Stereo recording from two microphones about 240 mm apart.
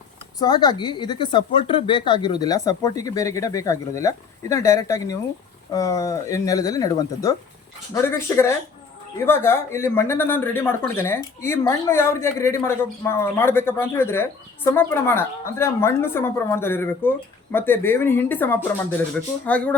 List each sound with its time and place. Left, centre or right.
0.3 s speech: centre